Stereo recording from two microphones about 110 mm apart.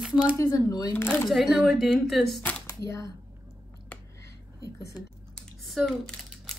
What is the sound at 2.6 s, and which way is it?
Speech, 25° left (ahead or behind).